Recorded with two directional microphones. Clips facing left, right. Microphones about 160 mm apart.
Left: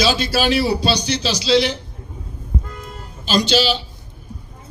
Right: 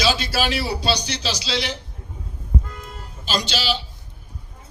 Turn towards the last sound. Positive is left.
turn(degrees=25)  # may be behind; listen again after turning